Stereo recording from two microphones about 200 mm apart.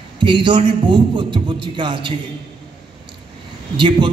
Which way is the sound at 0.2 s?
25° right (ahead or behind).